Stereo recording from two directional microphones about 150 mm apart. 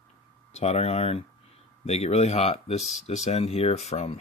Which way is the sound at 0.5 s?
45° left (ahead or behind).